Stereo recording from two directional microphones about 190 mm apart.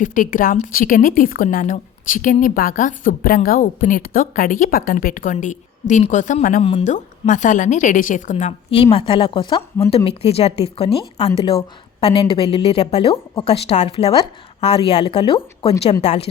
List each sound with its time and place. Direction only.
0.0 s a woman's voice: 45° left (ahead or behind)
6.6 s a woman's voice: 30° left (ahead or behind)